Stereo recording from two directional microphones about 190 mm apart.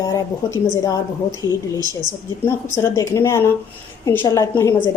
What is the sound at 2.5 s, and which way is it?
Speech, 10° left (ahead or behind).